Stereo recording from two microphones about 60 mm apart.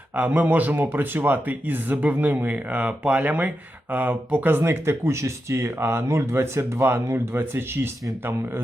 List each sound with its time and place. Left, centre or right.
0.2 s speech: right
4.6 s speech: right